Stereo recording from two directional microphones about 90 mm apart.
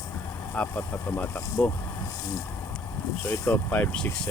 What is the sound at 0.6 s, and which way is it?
Speech, 10° left (ahead or behind).